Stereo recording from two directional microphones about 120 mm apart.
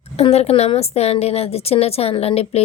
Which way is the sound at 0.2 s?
60° left (ahead or behind).